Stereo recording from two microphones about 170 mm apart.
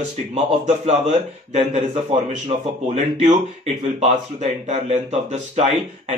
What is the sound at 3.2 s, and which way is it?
Speech, 40° right (ahead or behind).